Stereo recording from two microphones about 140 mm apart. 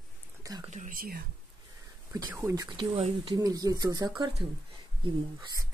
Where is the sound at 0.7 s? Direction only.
75° right (ahead or behind).